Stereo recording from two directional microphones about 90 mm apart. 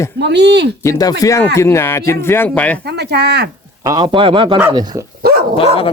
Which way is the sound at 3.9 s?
60° right (ahead or behind).